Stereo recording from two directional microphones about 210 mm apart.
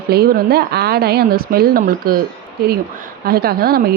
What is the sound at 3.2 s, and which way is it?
Speech, 45° right (ahead or behind).